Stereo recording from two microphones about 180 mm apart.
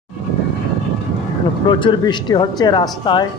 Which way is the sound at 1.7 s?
25° left (ahead or behind).